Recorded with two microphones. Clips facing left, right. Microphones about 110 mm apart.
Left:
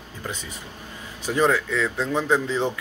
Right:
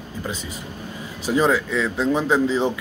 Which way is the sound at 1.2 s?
10° right (ahead or behind).